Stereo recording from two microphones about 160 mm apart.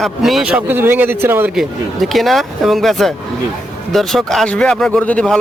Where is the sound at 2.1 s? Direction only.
Centre (ahead or behind).